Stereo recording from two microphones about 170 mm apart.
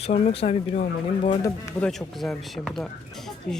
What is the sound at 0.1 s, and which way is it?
Speech, 40° left (ahead or behind).